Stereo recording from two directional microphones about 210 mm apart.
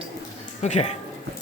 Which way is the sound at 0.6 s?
30° left (ahead or behind).